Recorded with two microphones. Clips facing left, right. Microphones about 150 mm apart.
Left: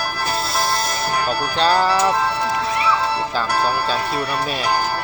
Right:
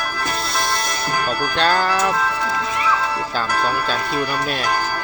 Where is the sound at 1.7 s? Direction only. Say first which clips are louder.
Left 2 dB; 30° left (ahead or behind).